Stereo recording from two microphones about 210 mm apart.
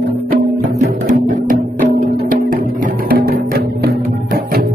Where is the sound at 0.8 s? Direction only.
35° right (ahead or behind).